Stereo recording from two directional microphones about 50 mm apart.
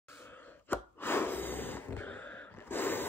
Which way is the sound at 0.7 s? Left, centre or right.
Left.